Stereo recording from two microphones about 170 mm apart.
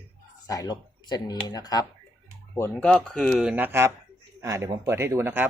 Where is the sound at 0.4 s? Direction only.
20° left (ahead or behind).